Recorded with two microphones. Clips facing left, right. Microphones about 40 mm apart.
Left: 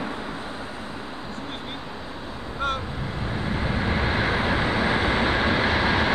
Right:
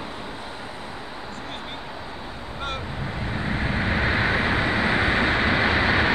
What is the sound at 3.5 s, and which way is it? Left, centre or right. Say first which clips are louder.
Vehicle: right 1 dB; right.